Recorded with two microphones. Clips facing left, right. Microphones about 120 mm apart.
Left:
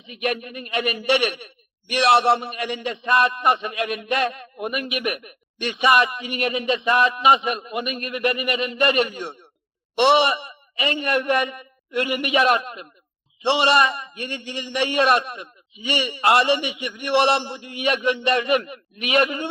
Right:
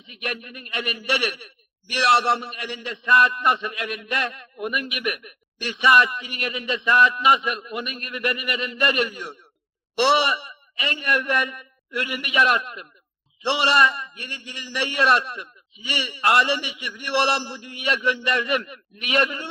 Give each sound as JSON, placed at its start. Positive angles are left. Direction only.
{"t": 0.1, "sound": "a man's voice", "side_deg": 20}